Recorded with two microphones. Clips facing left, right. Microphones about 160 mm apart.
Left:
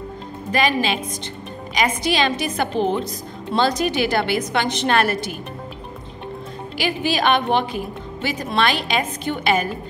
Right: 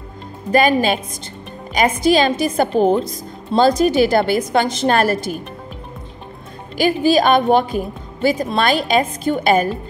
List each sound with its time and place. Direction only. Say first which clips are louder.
0.5 s a woman's voice: right 6 dB; 45° right (ahead or behind)
6.8 s a woman's voice: right 7 dB; 40° right (ahead or behind)